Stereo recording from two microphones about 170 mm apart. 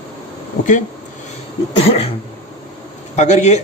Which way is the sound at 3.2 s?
40° left (ahead or behind).